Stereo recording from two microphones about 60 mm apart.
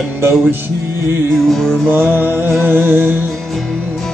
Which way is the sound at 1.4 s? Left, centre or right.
Centre.